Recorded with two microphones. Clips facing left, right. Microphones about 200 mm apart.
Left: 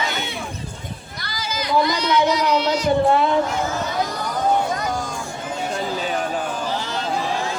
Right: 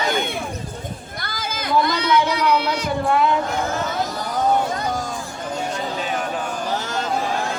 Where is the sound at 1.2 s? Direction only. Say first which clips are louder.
Left 1 dB; 55° right (ahead or behind).